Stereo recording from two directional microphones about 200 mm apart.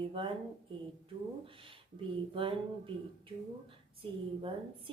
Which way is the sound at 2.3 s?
25° right (ahead or behind).